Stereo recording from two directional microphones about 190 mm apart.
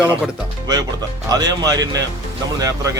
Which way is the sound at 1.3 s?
20° right (ahead or behind).